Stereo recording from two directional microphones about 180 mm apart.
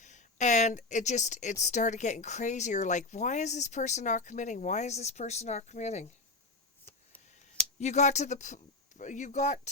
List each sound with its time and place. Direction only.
0.0 s speech: 40° left (ahead or behind)
6.9 s a sound: 15° left (ahead or behind)
7.8 s speech: 40° left (ahead or behind)